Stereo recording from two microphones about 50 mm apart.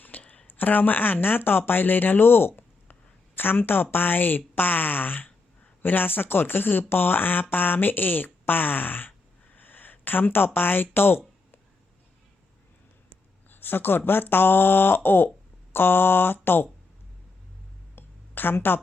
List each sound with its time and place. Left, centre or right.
0.3 s speech: left
13.5 s speech: left
17.9 s a sound: left